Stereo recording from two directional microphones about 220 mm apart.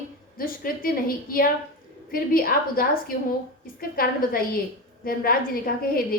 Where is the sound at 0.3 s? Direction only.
40° left (ahead or behind).